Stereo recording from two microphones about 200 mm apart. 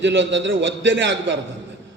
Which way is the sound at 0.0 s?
65° right (ahead or behind).